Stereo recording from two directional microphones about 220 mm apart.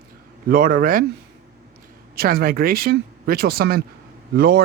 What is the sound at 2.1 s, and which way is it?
Speech, 40° right (ahead or behind).